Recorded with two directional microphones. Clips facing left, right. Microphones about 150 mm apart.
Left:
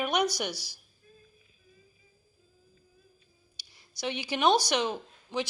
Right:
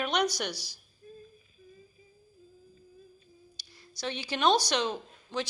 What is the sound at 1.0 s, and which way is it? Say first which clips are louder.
Humming: right 9 dB; 40° right (ahead or behind).